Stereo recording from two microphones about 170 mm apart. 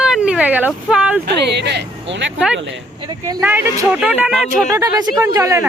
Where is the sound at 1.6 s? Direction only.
90° right.